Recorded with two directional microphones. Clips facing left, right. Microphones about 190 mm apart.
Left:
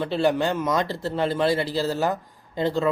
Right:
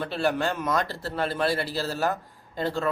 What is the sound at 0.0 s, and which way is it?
A man's voice, 15° left (ahead or behind).